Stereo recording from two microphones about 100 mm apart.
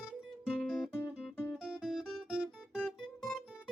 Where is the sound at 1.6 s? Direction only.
5° right (ahead or behind).